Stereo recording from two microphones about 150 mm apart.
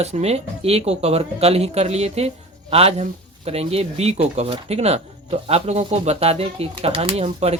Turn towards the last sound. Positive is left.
turn(degrees=-45)  # may be behind; listen again after turning